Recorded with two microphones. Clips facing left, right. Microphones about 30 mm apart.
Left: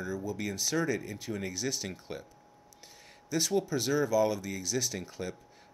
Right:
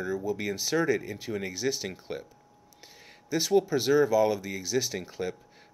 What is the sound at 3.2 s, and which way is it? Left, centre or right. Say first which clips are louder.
Speech: right 5 dB; centre.